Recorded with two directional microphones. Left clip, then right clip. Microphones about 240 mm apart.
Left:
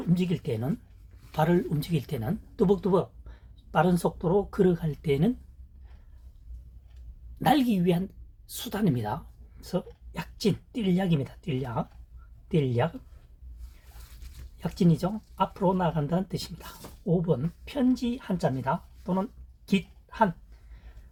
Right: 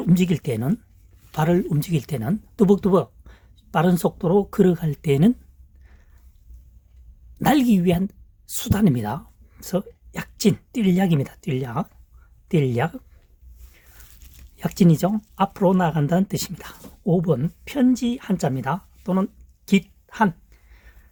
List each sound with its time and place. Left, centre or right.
0.1 s speech: right
7.3 s a woman's voice: right
14.6 s speech: right